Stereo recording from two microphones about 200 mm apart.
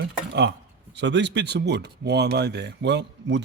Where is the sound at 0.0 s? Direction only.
55° right (ahead or behind).